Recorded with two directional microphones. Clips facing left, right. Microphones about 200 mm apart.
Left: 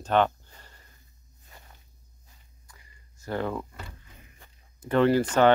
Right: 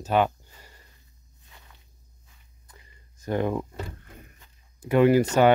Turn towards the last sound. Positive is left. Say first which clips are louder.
# right 2 dB
turn(degrees=-10)  # may be behind; listen again after turning